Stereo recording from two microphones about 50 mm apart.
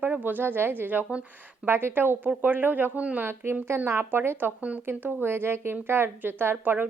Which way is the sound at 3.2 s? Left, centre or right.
Right.